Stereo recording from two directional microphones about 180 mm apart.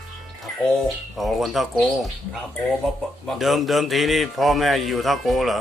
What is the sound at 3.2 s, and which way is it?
Speech, centre (ahead or behind).